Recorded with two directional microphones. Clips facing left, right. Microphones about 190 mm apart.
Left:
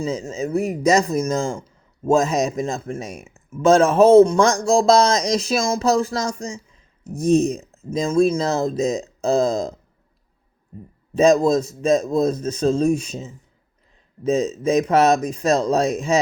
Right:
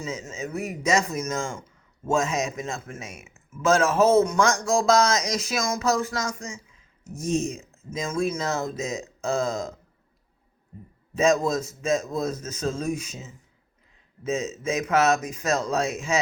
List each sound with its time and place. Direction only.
0.0 s speech: 35° left (ahead or behind)
11.1 s speech: 35° left (ahead or behind)